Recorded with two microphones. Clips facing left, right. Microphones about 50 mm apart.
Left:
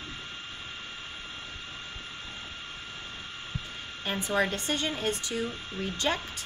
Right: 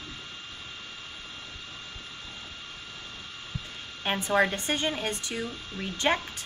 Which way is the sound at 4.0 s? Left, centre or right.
Right.